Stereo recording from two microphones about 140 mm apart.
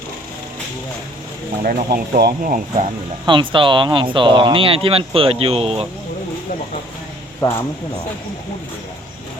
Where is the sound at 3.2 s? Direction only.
35° right (ahead or behind).